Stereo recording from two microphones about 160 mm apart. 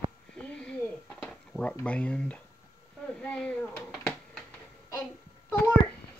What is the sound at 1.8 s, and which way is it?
Speech, 5° left (ahead or behind).